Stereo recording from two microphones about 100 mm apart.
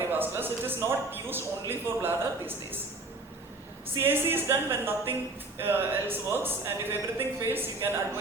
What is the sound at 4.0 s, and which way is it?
Speech, 20° right (ahead or behind).